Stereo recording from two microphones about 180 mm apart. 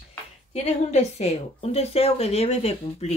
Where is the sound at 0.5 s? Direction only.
35° left (ahead or behind).